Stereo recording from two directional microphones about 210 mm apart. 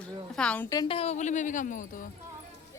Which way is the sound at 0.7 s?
20° left (ahead or behind).